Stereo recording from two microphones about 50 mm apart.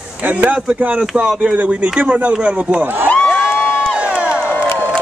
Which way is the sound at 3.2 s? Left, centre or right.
Centre.